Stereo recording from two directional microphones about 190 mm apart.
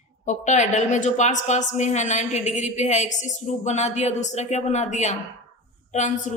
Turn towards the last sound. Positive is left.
turn(degrees=40)  # may be behind; listen again after turning